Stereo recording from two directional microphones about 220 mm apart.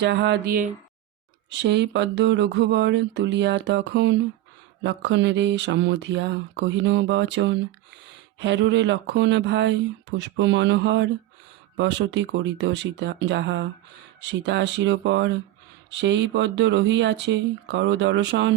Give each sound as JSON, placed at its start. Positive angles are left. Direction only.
{"t": 0.0, "sound": "speech", "side_deg": -50}